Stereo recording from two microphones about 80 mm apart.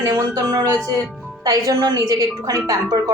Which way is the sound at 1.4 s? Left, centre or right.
Right.